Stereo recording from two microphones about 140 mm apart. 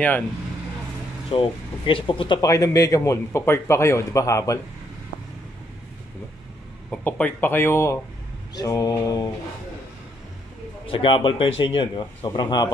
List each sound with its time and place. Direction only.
1.3 s speech: 40° left (ahead or behind)
2.5 s a man's voice: 25° left (ahead or behind)
6.9 s a man's voice: 10° left (ahead or behind); by 9.3 s 25° left (ahead or behind)
10.9 s speech: 40° left (ahead or behind)